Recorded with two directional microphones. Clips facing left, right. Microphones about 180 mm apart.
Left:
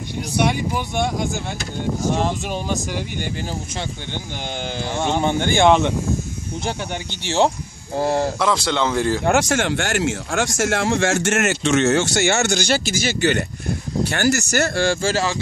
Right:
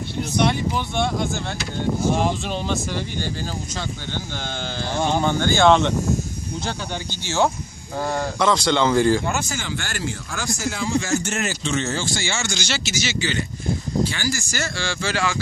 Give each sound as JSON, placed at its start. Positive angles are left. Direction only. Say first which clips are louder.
{"t": 0.4, "sound": "speech", "louder": "left 1 dB", "side_deg": 10}
{"t": 2.4, "sound": "speech", "louder": "left 1 dB", "side_deg": 10}
{"t": 5.2, "sound": "speech", "louder": "left 2 dB", "side_deg": 20}
{"t": 7.3, "sound": "speech", "louder": "left 3 dB", "side_deg": 25}
{"t": 8.4, "sound": "speech", "louder": "right 1 dB", "side_deg": 5}
{"t": 9.2, "sound": "speech", "louder": "left 8 dB", "side_deg": 85}